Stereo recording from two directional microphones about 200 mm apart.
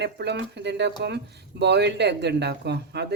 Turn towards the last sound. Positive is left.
turn(degrees=-55)  # may be behind; listen again after turning